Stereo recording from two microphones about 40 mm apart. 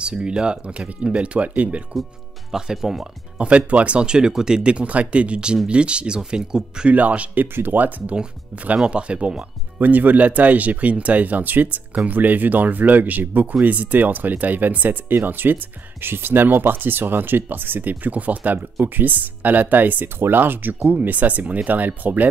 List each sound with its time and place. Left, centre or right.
0.0 s speech: right
2.5 s speech: centre
3.3 s speech: right; by 4.6 s centre
4.6 s speech: right
6.9 s speech: right
7.5 s speech: right
8.7 s speech: right
9.8 s speech: right
20.2 s speech: right